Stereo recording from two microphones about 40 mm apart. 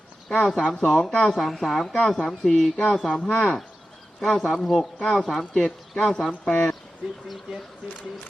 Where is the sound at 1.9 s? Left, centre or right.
Centre.